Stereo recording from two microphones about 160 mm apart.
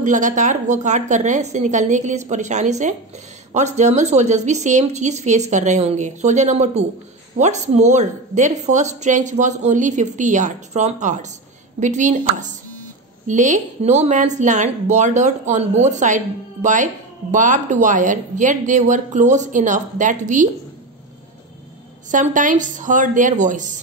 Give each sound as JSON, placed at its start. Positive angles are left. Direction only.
{"t": 0.0, "sound": "speech", "side_deg": -50}
{"t": 22.1, "sound": "speech", "side_deg": -55}